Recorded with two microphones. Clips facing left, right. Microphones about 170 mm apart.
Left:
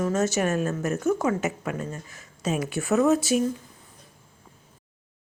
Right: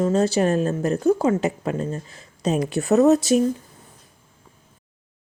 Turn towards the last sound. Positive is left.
turn(degrees=-40)  # may be behind; listen again after turning